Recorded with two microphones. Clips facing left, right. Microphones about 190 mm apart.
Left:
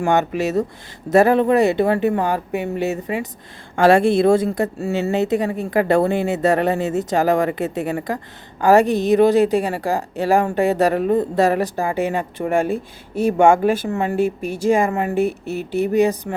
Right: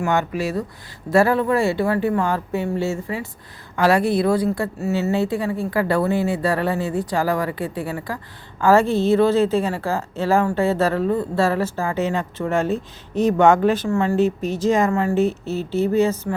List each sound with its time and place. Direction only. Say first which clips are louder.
0.0 s a woman's voice: left 3 dB; 20° left (ahead or behind)